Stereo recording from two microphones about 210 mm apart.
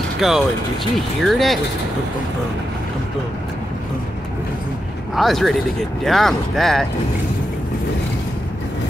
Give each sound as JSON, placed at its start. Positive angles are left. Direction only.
{"t": 0.2, "sound": "speech", "side_deg": 0}
{"t": 5.1, "sound": "speech", "side_deg": 0}